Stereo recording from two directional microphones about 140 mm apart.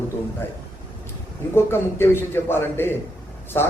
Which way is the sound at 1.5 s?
15° left (ahead or behind).